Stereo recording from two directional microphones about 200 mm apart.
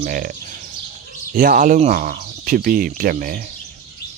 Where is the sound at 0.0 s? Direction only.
45° right (ahead or behind).